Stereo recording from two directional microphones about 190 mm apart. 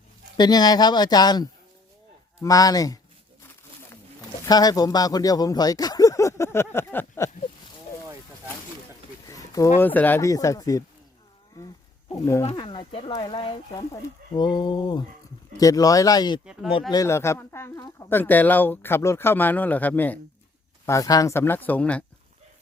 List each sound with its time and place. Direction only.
0.3 s speech: 20° left (ahead or behind)
4.4 s speech: 20° left (ahead or behind)
9.2 s a sound: 15° left (ahead or behind)
9.7 s speech: 10° left (ahead or behind)
11.5 s a sound: 20° left (ahead or behind)
12.2 s speech: 15° left (ahead or behind)
12.5 s speech: 25° left (ahead or behind)
16.5 s speech: 5° right (ahead or behind)
16.9 s speech: 15° left (ahead or behind)